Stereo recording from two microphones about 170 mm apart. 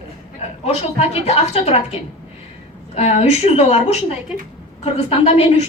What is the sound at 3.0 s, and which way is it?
A woman's voice, 40° left (ahead or behind).